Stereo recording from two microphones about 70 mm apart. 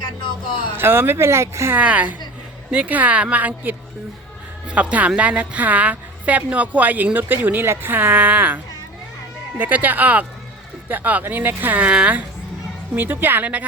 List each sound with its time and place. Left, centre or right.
0.7 s speech: right
1.7 s a woman's voice: right
13.0 s a woman's voice: right